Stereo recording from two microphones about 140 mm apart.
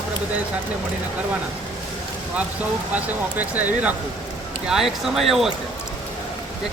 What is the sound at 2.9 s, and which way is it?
Speech, 10° right (ahead or behind).